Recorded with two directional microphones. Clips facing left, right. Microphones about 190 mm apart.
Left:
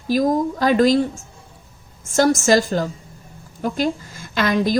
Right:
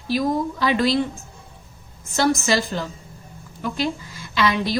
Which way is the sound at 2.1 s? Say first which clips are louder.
Left 5 dB; 45° left (ahead or behind).